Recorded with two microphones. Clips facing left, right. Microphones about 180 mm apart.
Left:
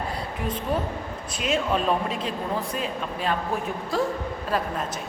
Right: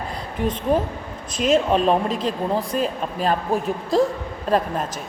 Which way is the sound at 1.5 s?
30° right (ahead or behind).